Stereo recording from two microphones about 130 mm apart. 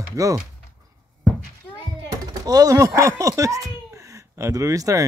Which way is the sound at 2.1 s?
30° right (ahead or behind).